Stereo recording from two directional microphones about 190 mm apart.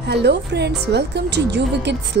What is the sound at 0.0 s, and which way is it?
A woman's voice, 60° right (ahead or behind).